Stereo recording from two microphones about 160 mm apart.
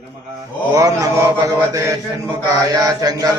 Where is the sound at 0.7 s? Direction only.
20° right (ahead or behind).